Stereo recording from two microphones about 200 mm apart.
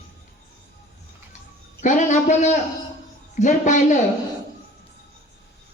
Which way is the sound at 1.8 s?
40° left (ahead or behind).